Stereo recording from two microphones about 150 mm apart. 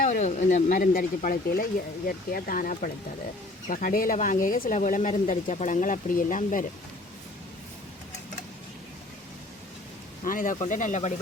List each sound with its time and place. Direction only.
0.0 s speech: 55° left (ahead or behind)
10.2 s speech: 65° left (ahead or behind)